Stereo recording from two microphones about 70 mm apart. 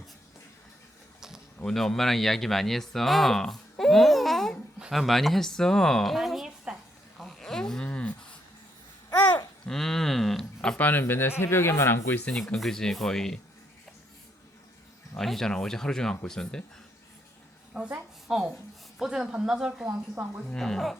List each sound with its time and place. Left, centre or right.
1.5 s speech: centre
7.2 s a sound: centre
9.6 s a sound: centre
10.8 s speech: left
12.3 s speech: centre
15.2 s speech: centre
17.7 s speech: centre
20.5 s speech: centre